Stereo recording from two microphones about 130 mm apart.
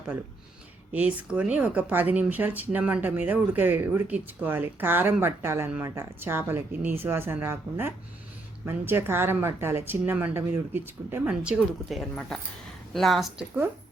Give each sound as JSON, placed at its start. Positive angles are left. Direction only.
{"t": 0.9, "sound": "speech", "side_deg": -10}